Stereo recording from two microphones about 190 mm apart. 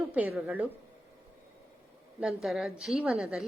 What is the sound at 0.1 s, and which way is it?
Speech, 10° right (ahead or behind).